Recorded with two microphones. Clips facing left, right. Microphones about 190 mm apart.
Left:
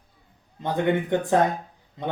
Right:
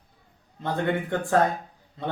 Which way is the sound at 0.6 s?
15° left (ahead or behind).